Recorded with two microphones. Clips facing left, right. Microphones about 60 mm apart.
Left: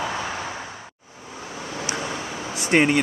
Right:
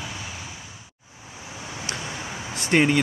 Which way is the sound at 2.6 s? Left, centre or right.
Centre.